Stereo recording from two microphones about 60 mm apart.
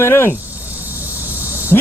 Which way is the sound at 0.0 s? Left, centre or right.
Left.